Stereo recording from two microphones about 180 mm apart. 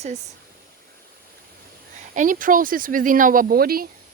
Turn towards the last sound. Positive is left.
turn(degrees=-55)  # may be behind; listen again after turning